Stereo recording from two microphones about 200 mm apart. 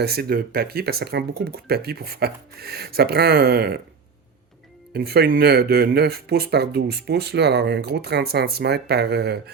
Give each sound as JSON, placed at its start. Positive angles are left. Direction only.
{"t": 0.0, "sound": "speech", "side_deg": -50}
{"t": 4.9, "sound": "speech", "side_deg": -55}